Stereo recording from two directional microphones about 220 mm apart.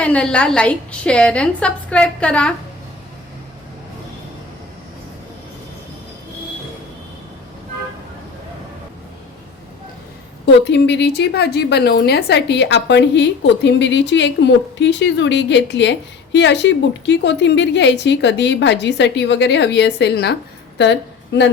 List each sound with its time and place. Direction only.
0.0 s a woman's voice: 5° left (ahead or behind)
10.4 s a woman's voice: 50° left (ahead or behind)